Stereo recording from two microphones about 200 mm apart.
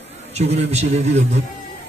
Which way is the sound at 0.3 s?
30° right (ahead or behind).